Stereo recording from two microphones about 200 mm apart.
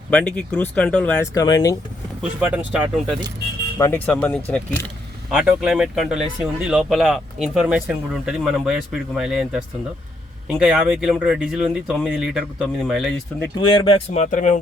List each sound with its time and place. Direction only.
0.1 s speech: 5° left (ahead or behind)
2.4 s speech: 5° right (ahead or behind)
3.8 s speech: 10° left (ahead or behind)
5.3 s speech: 5° right (ahead or behind)
13.7 s speech: 25° left (ahead or behind)